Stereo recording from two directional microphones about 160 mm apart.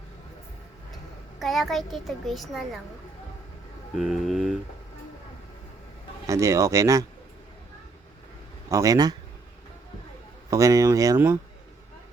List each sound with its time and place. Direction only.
1.4 s a child's voice: centre (ahead or behind)
3.9 s a child's voice: centre (ahead or behind)
6.2 s speech: 20° right (ahead or behind)
8.7 s speech: 20° right (ahead or behind)
10.5 s speech: 20° right (ahead or behind)